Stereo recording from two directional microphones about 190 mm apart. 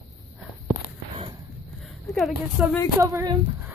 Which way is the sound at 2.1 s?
Centre (ahead or behind).